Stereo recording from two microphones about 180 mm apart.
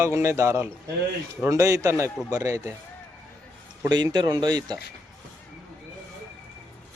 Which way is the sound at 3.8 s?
25° right (ahead or behind).